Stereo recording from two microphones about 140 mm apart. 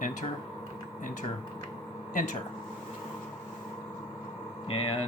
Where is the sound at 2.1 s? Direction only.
65° left (ahead or behind).